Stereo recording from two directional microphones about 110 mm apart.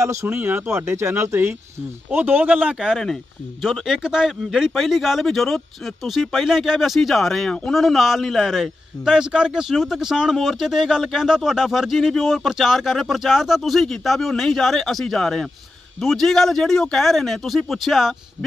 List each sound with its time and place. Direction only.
0.0 s speech: 25° right (ahead or behind); by 18.1 s centre (ahead or behind)